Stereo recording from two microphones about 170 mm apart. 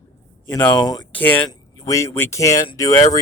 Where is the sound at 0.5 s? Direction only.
25° left (ahead or behind).